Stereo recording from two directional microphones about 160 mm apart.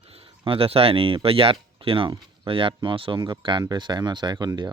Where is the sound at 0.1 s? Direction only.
35° right (ahead or behind).